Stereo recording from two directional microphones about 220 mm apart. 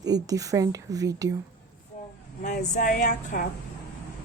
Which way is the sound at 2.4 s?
35° left (ahead or behind).